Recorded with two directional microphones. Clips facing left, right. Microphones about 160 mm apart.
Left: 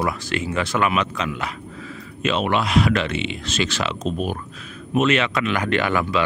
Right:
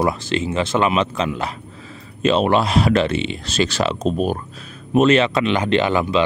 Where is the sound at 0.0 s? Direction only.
25° right (ahead or behind).